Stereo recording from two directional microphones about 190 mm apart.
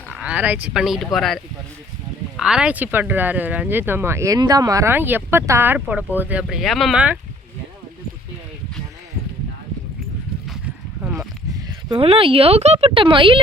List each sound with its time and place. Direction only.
0.1 s speech: 5° right (ahead or behind)
11.0 s a sound: 5° right (ahead or behind)
11.9 s speech: 30° right (ahead or behind)